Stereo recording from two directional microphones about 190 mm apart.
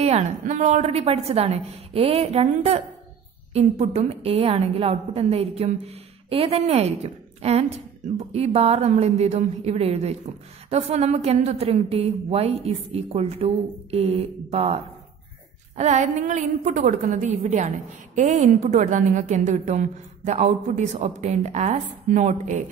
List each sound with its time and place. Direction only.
0.0 s a woman's voice: 35° right (ahead or behind)